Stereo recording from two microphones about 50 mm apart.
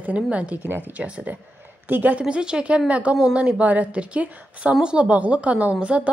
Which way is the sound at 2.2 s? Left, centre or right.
Centre.